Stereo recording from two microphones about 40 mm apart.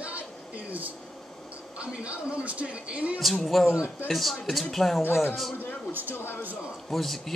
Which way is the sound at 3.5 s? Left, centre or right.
Centre.